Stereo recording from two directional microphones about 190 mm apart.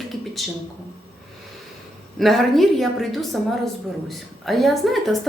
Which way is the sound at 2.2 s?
Centre (ahead or behind).